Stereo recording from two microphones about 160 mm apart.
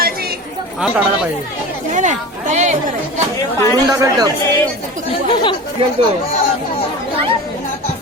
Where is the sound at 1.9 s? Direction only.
50° right (ahead or behind).